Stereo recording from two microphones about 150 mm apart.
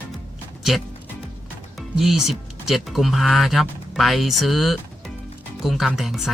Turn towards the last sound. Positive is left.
turn(degrees=0)  # may be behind; listen again after turning